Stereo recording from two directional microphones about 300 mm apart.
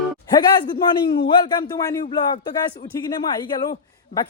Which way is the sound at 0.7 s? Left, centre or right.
Centre.